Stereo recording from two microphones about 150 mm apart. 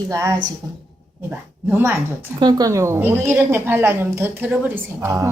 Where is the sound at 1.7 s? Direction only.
15° right (ahead or behind).